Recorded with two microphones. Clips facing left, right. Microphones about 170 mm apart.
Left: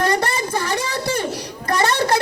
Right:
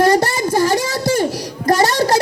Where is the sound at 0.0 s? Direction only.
40° right (ahead or behind).